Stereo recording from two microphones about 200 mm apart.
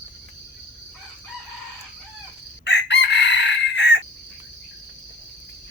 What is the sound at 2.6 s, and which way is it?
Chicken, 60° left (ahead or behind).